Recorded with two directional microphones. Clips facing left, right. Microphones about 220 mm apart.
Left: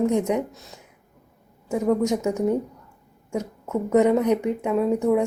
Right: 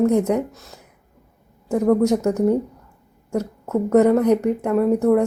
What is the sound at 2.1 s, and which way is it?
Speech, 10° left (ahead or behind).